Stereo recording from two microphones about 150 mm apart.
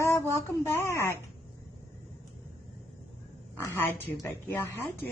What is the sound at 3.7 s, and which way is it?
Speech, 15° left (ahead or behind).